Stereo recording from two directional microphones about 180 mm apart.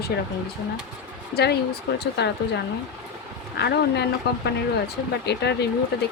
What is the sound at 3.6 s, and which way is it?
Speech, 65° left (ahead or behind).